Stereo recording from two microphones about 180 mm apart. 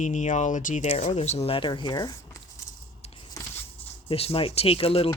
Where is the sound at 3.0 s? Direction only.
35° left (ahead or behind).